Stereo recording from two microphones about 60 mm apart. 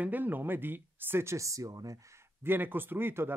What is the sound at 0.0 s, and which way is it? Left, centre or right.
Speech, right.